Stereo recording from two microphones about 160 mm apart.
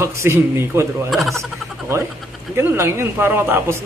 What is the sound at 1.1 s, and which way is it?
Speech, centre (ahead or behind).